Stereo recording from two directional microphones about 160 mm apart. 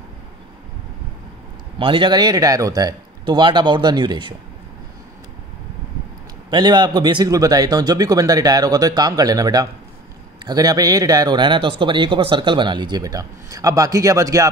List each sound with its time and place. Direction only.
1.8 s a man's voice: 30° right (ahead or behind)
6.5 s a man's voice: 30° right (ahead or behind)